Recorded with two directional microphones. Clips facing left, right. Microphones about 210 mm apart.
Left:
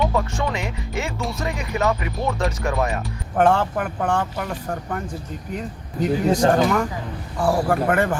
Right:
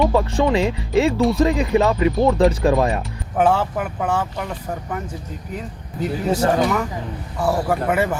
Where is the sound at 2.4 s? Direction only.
30° right (ahead or behind).